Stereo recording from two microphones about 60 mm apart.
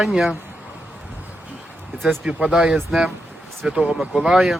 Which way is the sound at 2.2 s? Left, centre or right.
Centre.